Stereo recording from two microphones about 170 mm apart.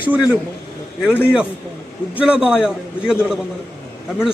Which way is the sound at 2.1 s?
5° right (ahead or behind).